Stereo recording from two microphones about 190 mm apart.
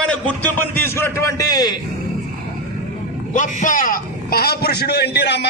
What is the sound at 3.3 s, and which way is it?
A man's voice, 40° left (ahead or behind).